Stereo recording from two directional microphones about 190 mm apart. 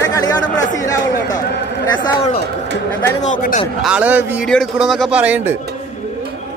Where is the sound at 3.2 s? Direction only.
40° left (ahead or behind).